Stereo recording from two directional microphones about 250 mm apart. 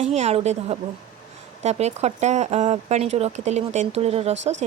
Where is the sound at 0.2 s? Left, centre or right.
Right.